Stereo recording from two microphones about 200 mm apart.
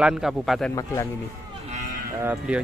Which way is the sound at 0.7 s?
15° left (ahead or behind).